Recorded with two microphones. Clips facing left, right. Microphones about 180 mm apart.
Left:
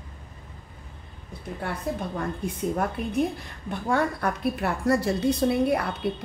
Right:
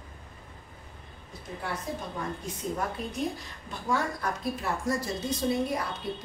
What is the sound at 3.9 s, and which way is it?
A woman's voice, 60° left (ahead or behind).